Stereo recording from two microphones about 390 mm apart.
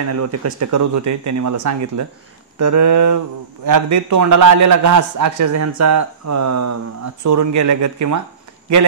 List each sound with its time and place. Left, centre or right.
0.0 s a man's voice: right